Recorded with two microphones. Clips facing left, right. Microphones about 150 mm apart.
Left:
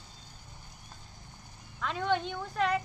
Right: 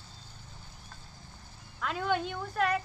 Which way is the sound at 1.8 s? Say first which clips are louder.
Even; 5° right (ahead or behind).